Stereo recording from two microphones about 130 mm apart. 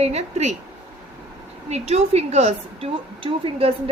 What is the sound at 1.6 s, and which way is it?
A woman's voice, 55° right (ahead or behind).